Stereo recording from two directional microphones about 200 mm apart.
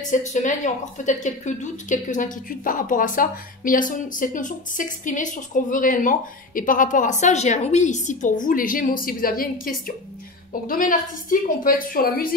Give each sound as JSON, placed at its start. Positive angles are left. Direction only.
{"t": 0.1, "sound": "a woman's voice", "side_deg": 35}